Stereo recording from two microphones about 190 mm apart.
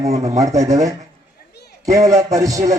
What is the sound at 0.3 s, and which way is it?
A man's voice, 15° right (ahead or behind).